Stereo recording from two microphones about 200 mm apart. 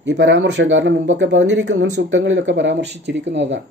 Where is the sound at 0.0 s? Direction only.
65° right (ahead or behind).